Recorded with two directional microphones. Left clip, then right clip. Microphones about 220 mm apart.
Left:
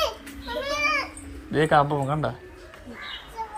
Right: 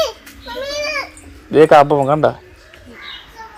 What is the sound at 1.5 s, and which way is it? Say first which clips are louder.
Speech: right 12 dB; 25° right (ahead or behind).